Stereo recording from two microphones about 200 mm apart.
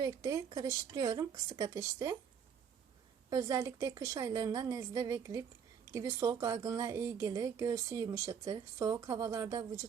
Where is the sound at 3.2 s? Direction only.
15° right (ahead or behind).